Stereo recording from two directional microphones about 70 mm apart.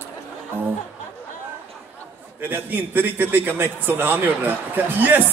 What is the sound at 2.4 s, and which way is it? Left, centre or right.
A man's voice, right.